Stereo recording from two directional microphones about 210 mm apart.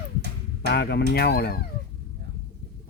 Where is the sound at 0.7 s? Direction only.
50° left (ahead or behind).